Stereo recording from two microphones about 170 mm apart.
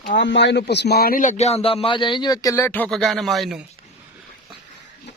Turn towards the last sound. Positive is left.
turn(degrees=0)  # may be behind; listen again after turning